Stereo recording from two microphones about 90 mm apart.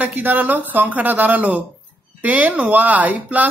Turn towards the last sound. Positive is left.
turn(degrees=-20)  # may be behind; listen again after turning